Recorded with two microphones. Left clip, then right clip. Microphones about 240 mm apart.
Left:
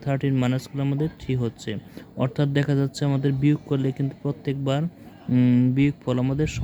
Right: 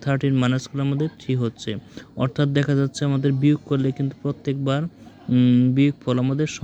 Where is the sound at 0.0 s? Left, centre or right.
Centre.